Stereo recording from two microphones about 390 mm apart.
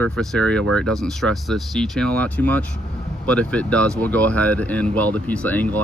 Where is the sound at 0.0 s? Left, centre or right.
Centre.